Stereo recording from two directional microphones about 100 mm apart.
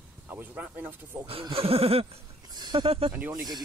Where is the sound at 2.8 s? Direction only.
75° right (ahead or behind).